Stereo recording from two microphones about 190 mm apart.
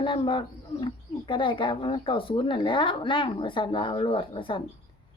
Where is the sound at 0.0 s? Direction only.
25° left (ahead or behind).